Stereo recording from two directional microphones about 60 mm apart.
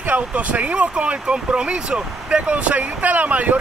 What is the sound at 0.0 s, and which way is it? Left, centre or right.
Speech, right.